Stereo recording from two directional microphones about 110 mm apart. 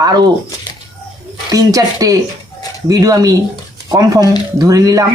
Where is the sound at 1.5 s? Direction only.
35° right (ahead or behind).